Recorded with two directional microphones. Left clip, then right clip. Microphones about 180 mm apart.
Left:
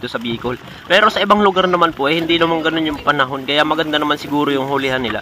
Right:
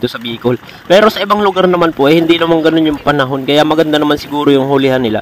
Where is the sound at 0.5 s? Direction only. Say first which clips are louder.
Right 7 dB; 50° right (ahead or behind).